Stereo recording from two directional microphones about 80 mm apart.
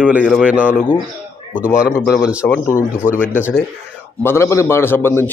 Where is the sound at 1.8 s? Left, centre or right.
Centre.